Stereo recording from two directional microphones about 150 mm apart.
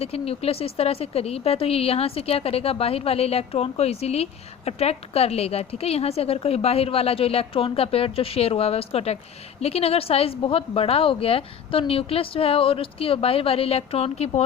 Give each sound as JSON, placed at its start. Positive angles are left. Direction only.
{"t": 0.0, "sound": "speech", "side_deg": 40}